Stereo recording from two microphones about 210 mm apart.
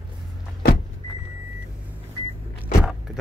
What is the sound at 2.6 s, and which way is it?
Vehicle, 5° right (ahead or behind).